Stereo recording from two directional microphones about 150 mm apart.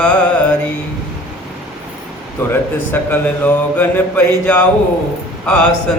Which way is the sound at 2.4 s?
10° left (ahead or behind).